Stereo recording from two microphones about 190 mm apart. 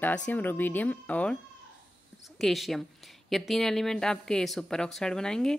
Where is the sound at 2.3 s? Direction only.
Centre (ahead or behind).